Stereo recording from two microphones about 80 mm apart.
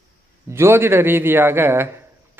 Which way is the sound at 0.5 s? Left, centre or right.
Right.